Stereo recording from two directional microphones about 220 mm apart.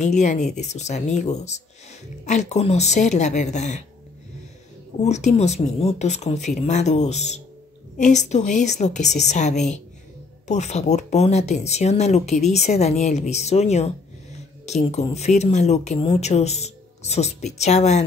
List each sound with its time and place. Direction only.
0.2 s speech: 30° left (ahead or behind)
4.9 s speech: 30° left (ahead or behind)